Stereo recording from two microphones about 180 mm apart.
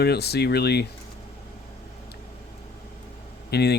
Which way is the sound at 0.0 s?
65° left (ahead or behind).